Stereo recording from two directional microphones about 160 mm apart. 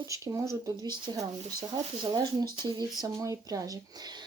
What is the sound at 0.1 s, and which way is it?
Speech, 20° right (ahead or behind).